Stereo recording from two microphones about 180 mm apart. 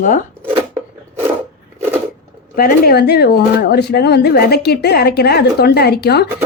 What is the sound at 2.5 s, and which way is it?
Speech, 55° left (ahead or behind).